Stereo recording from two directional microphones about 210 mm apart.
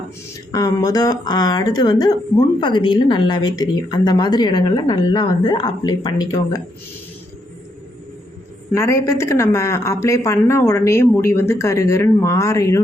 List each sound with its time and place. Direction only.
0.5 s a woman's voice: 15° left (ahead or behind)
8.7 s a woman's voice: 15° left (ahead or behind)